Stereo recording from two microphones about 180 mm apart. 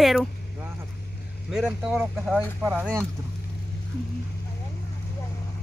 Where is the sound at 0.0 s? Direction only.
Centre (ahead or behind).